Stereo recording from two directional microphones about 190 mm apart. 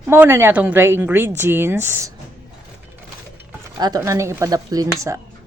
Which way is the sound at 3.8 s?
20° right (ahead or behind).